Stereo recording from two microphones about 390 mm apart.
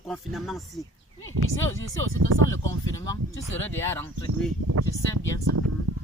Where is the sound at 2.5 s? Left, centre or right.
Centre.